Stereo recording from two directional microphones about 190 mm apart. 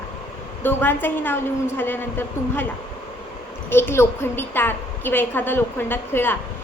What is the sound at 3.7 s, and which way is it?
A woman's voice, 10° left (ahead or behind).